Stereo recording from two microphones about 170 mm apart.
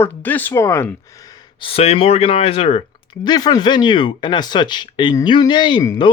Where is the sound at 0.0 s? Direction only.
10° left (ahead or behind).